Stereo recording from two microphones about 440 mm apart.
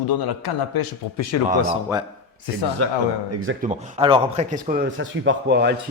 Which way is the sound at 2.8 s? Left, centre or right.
Right.